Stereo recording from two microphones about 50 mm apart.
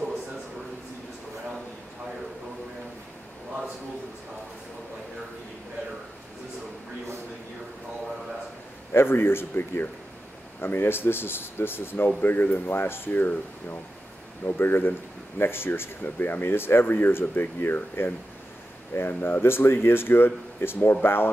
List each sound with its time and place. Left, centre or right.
8.9 s speech: left